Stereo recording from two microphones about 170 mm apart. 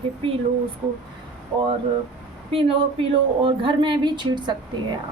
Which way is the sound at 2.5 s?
35° right (ahead or behind).